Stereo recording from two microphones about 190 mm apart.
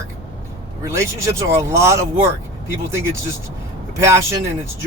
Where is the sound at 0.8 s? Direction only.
15° right (ahead or behind).